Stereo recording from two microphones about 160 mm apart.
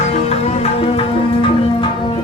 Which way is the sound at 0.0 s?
40° left (ahead or behind).